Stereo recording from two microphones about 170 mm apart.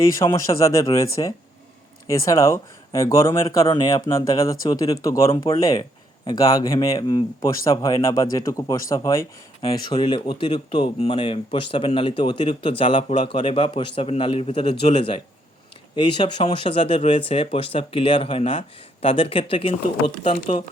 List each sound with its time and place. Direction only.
0.1 s speech: 20° left (ahead or behind)
5.3 s speech: 30° left (ahead or behind)